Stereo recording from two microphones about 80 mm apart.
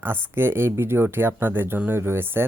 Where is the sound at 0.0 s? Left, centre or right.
Right.